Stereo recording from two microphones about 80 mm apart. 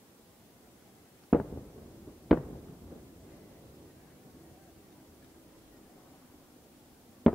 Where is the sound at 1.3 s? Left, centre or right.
Centre.